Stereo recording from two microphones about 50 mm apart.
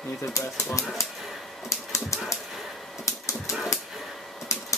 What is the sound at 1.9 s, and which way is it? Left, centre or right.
Dog, left.